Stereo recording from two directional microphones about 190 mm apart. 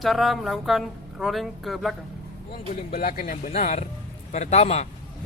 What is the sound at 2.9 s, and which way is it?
A man's voice, 50° left (ahead or behind).